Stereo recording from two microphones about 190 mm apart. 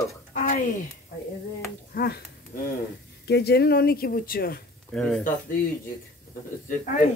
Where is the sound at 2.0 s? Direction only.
55° left (ahead or behind).